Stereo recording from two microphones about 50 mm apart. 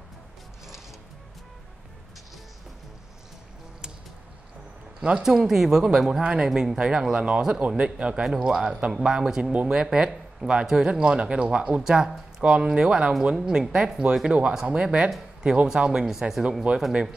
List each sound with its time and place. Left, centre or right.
5.2 s speech: centre
9.4 s speech: right
9.7 s speech: centre
16.7 s speech: right